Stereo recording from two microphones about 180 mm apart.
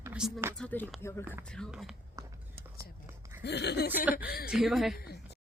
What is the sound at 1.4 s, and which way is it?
Speech, 5° left (ahead or behind).